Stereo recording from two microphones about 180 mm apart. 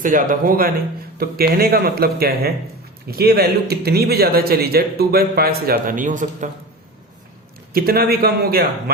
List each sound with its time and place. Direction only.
0.0 s speech: 50° right (ahead or behind)
7.7 s speech: 55° right (ahead or behind)